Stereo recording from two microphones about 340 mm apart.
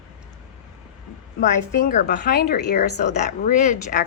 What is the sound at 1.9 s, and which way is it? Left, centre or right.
Speech, left.